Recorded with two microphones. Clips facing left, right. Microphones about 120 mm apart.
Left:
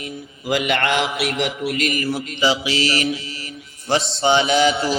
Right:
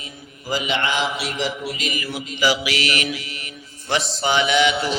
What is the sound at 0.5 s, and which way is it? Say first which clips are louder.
Speech: left 3 dB; 60° left (ahead or behind).